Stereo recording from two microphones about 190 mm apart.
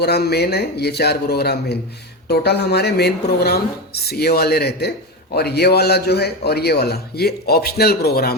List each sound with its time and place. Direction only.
0.0 s a man's voice: 60° left (ahead or behind)